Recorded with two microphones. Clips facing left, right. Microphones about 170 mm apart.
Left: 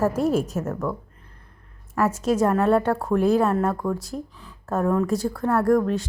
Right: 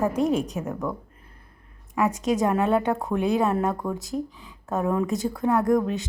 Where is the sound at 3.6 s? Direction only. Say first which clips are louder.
Left 2 dB; 10° right (ahead or behind).